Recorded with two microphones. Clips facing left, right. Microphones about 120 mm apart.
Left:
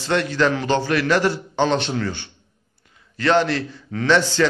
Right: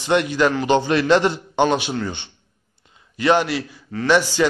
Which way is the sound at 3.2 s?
15° right (ahead or behind).